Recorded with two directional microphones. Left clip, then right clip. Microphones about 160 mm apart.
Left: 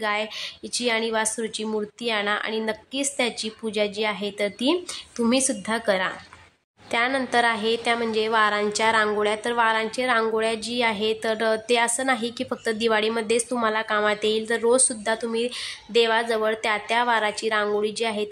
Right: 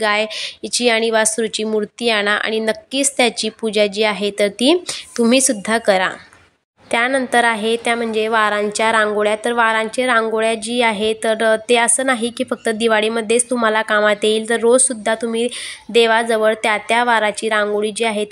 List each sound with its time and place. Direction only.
0.0 s speech: 30° right (ahead or behind)